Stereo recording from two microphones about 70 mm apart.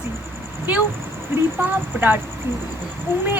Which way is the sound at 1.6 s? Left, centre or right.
Right.